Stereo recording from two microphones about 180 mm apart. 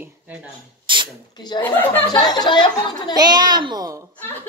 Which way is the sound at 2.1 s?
25° left (ahead or behind).